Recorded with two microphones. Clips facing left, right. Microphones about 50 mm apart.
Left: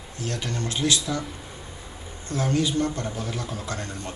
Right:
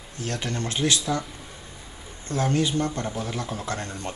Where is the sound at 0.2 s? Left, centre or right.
Right.